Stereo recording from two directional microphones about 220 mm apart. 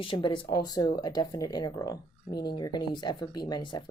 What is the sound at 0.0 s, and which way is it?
Speech, 20° left (ahead or behind).